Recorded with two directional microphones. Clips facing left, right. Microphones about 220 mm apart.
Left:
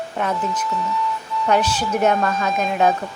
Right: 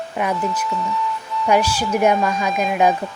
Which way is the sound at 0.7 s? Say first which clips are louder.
Even; centre (ahead or behind).